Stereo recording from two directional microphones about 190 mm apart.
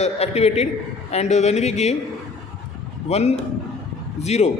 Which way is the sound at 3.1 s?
35° left (ahead or behind).